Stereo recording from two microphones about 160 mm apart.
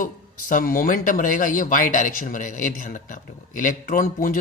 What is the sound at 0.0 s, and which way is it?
Speech, 60° left (ahead or behind).